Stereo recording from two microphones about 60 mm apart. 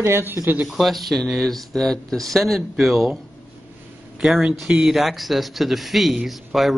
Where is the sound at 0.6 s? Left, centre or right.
Centre.